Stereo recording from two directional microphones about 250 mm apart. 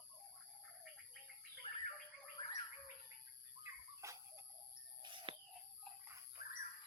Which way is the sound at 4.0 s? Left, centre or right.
Centre.